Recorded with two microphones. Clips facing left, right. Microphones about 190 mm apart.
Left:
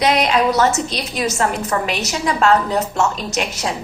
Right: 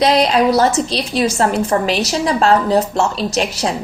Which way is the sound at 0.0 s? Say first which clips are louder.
Right 3 dB; 30° right (ahead or behind).